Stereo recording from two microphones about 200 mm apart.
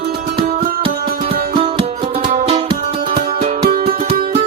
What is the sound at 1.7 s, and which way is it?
Music, 25° right (ahead or behind).